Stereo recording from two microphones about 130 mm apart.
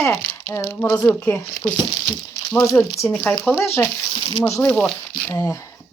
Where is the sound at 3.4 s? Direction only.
Centre (ahead or behind).